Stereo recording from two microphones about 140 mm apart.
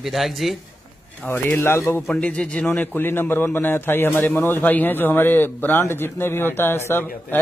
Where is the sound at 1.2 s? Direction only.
15° left (ahead or behind).